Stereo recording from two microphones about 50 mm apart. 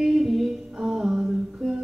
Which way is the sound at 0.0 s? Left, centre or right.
Centre.